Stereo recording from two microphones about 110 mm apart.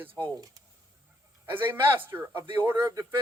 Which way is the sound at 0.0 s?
20° right (ahead or behind).